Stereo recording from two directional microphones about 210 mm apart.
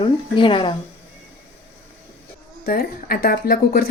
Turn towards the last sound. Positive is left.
turn(degrees=45)  # may be behind; listen again after turning